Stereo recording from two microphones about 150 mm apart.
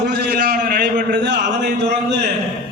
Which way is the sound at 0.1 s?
80° right.